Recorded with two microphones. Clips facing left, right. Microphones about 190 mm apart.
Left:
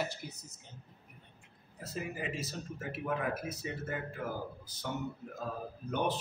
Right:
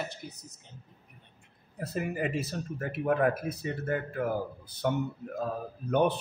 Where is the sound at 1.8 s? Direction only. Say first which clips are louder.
Right 7 dB; 60° right (ahead or behind).